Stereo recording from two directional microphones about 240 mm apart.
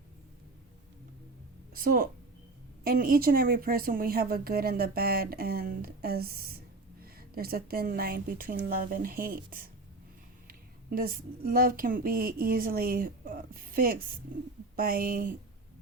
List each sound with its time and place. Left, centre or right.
1.7 s a woman's voice: right